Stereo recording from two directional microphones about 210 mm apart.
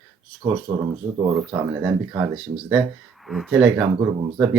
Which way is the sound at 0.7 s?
20° right (ahead or behind).